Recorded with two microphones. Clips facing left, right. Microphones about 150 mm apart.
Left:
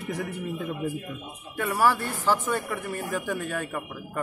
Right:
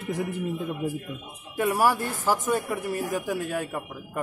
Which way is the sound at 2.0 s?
40° right (ahead or behind).